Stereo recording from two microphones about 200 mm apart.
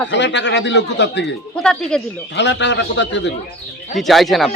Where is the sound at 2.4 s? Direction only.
60° left (ahead or behind).